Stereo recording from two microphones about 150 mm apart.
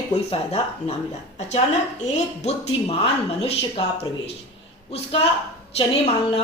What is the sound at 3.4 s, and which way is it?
Speech, 40° left (ahead or behind).